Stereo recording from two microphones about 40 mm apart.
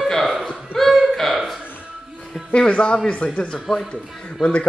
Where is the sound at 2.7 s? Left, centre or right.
Left.